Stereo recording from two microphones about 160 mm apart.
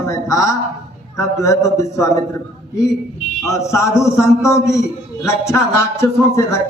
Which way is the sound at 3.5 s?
20° left (ahead or behind).